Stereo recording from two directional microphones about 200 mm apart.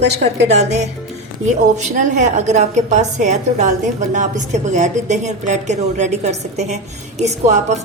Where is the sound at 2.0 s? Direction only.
35° right (ahead or behind).